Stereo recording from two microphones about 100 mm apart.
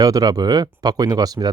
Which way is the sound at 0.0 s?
40° right (ahead or behind).